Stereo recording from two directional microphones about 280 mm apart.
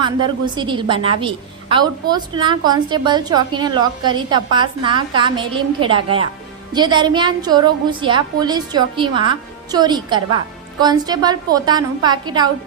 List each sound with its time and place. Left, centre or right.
0.0 s a woman's voice: centre